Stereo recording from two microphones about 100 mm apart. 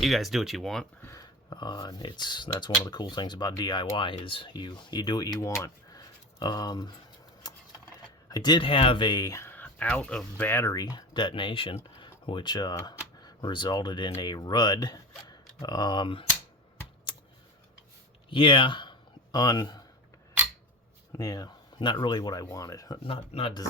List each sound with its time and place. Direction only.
0.0 s speech: centre (ahead or behind)
1.0 s speech: 35° left (ahead or behind)
5.9 s a sound: 40° left (ahead or behind)
8.3 s speech: 45° left (ahead or behind)
8.6 s speech: 65° left (ahead or behind); by 9.5 s 35° left (ahead or behind)
9.5 s speech: 15° left (ahead or behind)
10.8 s speech: 40° left (ahead or behind); by 11.8 s 60° left (ahead or behind)
11.9 s a sound: 55° left (ahead or behind)
12.8 s speech: 45° left (ahead or behind)
17.1 s computer keyboard: 65° left (ahead or behind)
18.3 s a sound: 55° left (ahead or behind)
21.2 s speech: 40° left (ahead or behind)
23.0 s speech: 75° left (ahead or behind)